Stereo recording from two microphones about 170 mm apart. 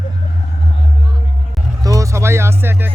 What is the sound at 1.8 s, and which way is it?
Speech, 20° right (ahead or behind).